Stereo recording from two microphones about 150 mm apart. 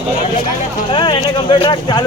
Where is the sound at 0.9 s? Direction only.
35° left (ahead or behind).